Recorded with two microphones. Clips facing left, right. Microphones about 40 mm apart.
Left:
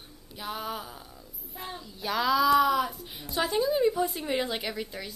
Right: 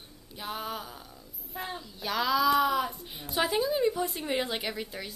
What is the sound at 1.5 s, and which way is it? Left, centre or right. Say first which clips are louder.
Speech: right 3 dB; centre.